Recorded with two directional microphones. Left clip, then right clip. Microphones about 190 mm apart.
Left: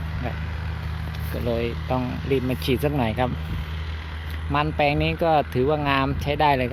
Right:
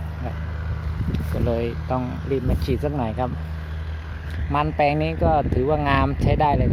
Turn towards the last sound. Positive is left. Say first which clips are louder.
# even
turn(degrees=10)  # may be behind; listen again after turning